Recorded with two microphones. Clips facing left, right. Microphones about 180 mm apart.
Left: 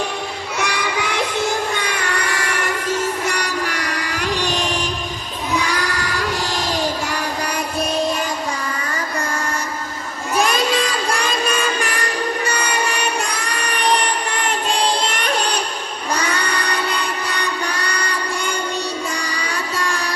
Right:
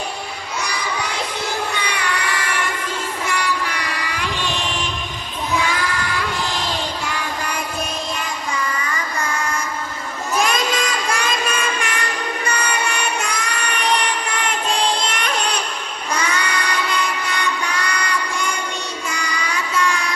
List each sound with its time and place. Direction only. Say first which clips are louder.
1.7 s music: left 1 dB; 45° left (ahead or behind)
5.5 s child singing: even; 40° left (ahead or behind)
10.4 s music: left 3 dB; 35° left (ahead or behind)
16.1 s child singing: even; 35° left (ahead or behind)
19.1 s music: even; 35° left (ahead or behind)